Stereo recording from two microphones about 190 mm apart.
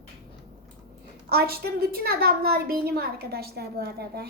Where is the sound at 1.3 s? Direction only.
55° right (ahead or behind).